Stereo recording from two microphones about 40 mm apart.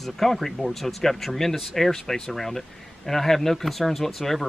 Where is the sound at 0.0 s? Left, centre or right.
Centre.